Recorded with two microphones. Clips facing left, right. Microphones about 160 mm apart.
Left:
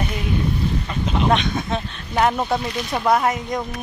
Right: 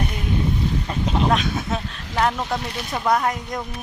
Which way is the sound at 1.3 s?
5° right (ahead or behind).